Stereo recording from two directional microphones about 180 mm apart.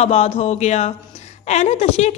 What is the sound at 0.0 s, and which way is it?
A woman's voice, 35° left (ahead or behind).